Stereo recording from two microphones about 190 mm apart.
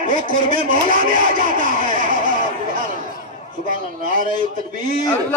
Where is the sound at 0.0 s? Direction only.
45° right (ahead or behind).